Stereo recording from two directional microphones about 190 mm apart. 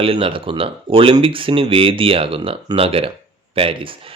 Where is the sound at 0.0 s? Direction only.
30° right (ahead or behind).